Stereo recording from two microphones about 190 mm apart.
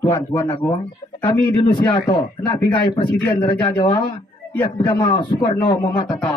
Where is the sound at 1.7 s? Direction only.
25° left (ahead or behind).